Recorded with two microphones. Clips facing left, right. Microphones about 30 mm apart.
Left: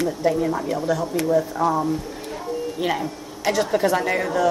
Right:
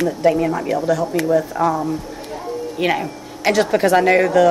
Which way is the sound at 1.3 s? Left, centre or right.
Right.